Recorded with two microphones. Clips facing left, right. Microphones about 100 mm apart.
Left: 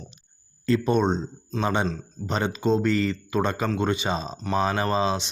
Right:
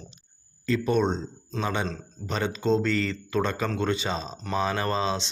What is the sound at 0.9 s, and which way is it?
Speech, 20° left (ahead or behind).